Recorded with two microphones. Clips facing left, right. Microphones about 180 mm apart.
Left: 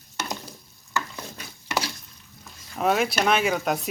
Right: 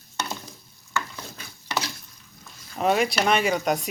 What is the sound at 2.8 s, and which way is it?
Speech, centre (ahead or behind).